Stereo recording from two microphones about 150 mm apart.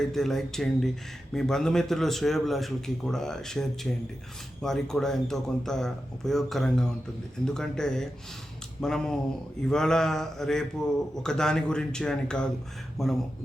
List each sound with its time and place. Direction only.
0.0 s a man's voice: centre (ahead or behind)